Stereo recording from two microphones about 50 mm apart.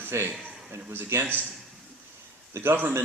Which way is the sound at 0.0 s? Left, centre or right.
Right.